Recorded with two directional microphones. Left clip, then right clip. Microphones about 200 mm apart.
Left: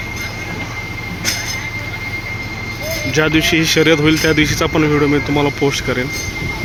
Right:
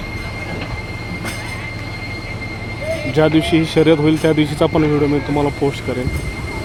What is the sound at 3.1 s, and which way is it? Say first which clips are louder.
Speech: left 1 dB; 15° right (ahead or behind).